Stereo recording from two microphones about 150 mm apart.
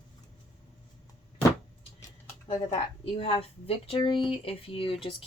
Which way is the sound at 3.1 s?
35° left (ahead or behind).